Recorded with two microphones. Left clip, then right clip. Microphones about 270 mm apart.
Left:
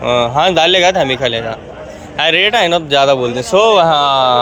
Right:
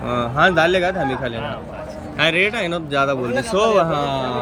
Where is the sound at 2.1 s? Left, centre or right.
Centre.